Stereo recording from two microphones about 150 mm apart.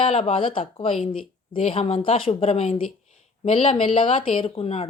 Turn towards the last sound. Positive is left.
turn(degrees=40)  # may be behind; listen again after turning